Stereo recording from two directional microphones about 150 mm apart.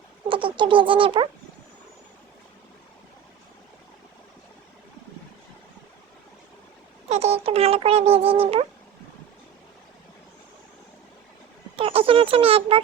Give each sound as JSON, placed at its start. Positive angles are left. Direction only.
{"t": 0.3, "sound": "speech", "side_deg": -35}
{"t": 7.1, "sound": "speech", "side_deg": -45}
{"t": 11.8, "sound": "speech", "side_deg": -40}